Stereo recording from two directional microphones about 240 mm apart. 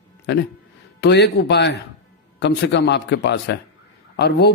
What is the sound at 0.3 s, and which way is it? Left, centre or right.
A man's voice, left.